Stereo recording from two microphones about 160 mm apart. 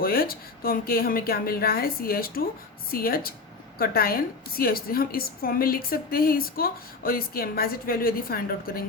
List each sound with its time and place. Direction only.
0.0 s a woman's voice: 65° left (ahead or behind)